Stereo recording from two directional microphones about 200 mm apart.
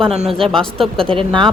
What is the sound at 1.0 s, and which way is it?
Speech, 25° right (ahead or behind).